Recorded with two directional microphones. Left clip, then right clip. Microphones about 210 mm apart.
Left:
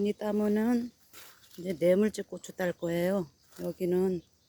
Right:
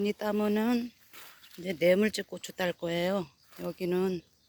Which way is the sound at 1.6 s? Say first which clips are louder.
Right 1 dB; 10° left (ahead or behind).